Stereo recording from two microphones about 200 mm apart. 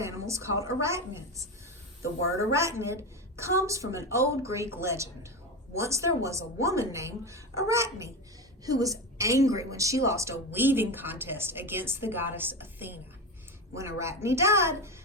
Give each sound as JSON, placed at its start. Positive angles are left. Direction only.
{"t": 0.0, "sound": "speech", "side_deg": -15}